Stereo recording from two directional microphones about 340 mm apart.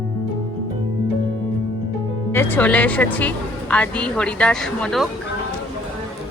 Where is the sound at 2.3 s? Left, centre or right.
Centre.